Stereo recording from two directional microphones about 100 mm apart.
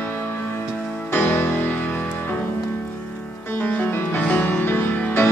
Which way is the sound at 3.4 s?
20° left (ahead or behind).